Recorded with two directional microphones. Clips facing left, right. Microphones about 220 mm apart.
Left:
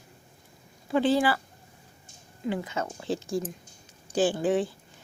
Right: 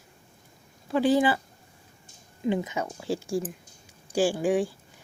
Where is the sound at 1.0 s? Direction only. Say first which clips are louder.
Right 2 dB; 15° right (ahead or behind).